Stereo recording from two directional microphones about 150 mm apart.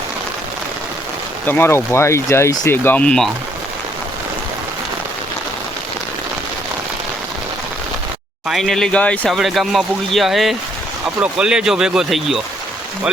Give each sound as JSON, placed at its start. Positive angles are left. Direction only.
{"t": 1.5, "sound": "speech", "side_deg": 15}
{"t": 8.4, "sound": "speech", "side_deg": 0}